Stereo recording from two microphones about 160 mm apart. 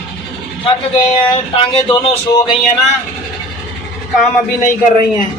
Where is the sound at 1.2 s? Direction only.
35° left (ahead or behind).